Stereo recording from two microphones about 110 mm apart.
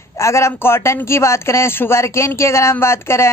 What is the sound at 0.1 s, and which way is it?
A man's voice, 25° left (ahead or behind).